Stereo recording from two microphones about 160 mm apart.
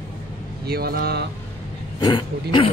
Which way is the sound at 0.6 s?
75° right (ahead or behind).